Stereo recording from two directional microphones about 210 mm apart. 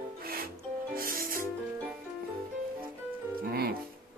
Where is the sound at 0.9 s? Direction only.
45° right (ahead or behind).